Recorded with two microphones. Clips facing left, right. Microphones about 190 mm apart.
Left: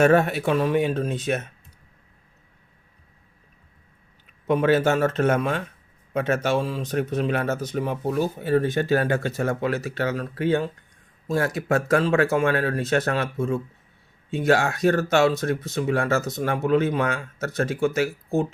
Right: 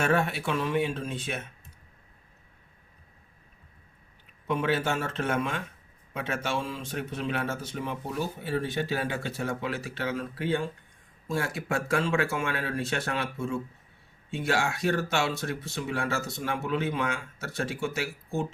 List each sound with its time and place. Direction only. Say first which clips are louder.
0.0 s speech: left 8 dB; 45° left (ahead or behind)
4.4 s speech: left 8 dB; 45° left (ahead or behind)